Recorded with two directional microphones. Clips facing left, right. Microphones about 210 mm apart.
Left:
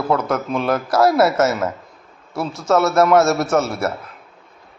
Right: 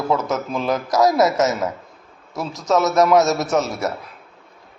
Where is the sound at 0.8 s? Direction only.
20° right (ahead or behind).